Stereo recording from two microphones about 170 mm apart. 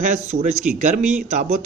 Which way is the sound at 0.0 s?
45° right (ahead or behind).